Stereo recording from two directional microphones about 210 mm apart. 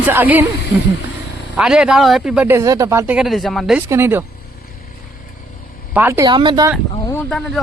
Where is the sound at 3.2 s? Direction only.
Centre (ahead or behind).